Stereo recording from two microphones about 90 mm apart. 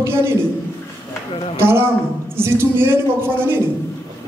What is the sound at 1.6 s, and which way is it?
Speech, 25° right (ahead or behind).